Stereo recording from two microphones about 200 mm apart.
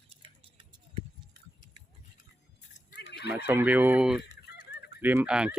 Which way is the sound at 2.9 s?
55° left (ahead or behind).